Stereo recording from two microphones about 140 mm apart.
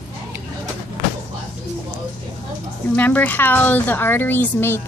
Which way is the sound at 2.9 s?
10° left (ahead or behind).